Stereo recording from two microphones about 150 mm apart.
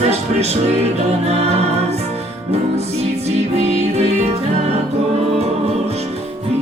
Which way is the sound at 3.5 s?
45° right (ahead or behind).